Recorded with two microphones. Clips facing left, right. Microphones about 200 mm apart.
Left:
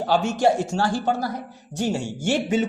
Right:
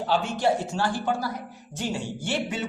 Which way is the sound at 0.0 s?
45° left (ahead or behind).